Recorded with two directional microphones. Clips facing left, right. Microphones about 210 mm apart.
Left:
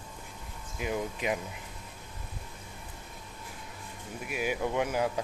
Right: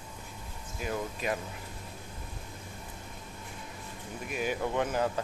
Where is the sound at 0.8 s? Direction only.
15° left (ahead or behind).